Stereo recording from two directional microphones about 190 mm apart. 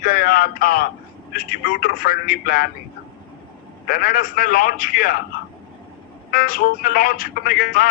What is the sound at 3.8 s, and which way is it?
A man's voice, 45° left (ahead or behind).